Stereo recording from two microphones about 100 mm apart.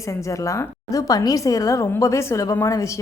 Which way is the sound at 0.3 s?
30° left (ahead or behind).